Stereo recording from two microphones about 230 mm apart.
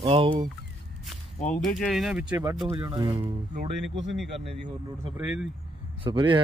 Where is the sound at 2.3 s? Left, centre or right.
Centre.